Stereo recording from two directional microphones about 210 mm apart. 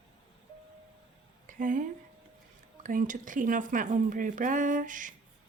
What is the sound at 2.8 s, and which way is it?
Speech, 40° right (ahead or behind).